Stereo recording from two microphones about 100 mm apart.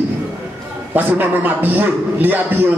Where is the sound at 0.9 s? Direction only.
20° right (ahead or behind).